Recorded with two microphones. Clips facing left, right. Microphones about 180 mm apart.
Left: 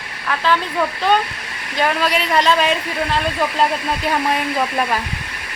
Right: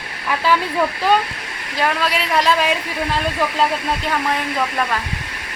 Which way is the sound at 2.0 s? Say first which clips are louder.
Left 2 dB; centre (ahead or behind).